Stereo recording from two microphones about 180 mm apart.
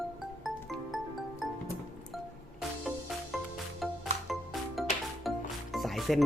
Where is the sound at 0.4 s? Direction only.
Centre (ahead or behind).